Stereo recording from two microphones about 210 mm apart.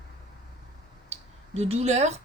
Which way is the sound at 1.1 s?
30° right (ahead or behind).